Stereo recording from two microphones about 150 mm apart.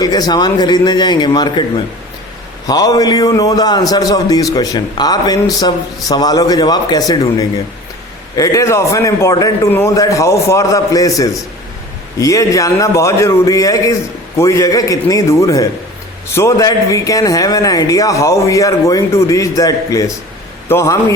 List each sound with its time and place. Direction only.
0.0 s a man's voice: 25° left (ahead or behind)
2.6 s a man's voice: 25° left (ahead or behind)